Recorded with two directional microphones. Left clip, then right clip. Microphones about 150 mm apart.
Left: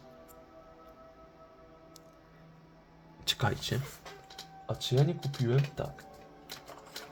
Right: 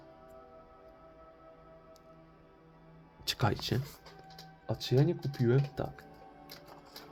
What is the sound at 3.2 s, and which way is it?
Speech, 15° right (ahead or behind).